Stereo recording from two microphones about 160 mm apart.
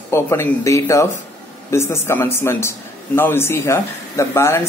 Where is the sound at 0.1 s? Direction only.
15° left (ahead or behind).